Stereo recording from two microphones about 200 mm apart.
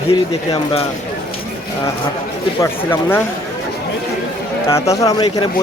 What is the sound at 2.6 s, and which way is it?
Speech, 10° left (ahead or behind).